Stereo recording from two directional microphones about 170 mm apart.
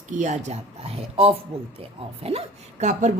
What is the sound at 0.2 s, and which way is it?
A woman's voice, 45° right (ahead or behind).